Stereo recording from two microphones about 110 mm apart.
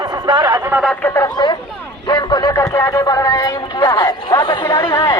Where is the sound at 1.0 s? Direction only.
25° left (ahead or behind).